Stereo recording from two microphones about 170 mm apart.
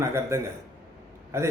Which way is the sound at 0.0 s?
15° right (ahead or behind).